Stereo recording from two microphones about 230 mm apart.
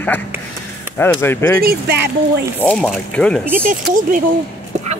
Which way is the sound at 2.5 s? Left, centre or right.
Centre.